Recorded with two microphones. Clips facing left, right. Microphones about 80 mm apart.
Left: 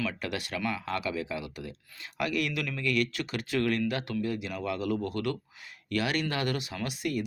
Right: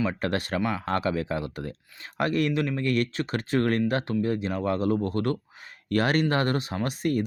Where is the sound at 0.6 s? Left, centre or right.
Right.